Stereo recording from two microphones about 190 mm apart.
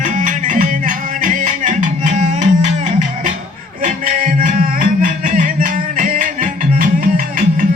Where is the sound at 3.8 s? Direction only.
45° right (ahead or behind).